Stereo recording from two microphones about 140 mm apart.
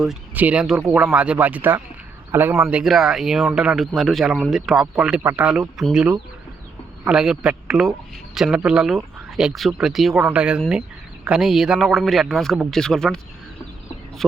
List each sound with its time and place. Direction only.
0.0 s speech: 5° right (ahead or behind)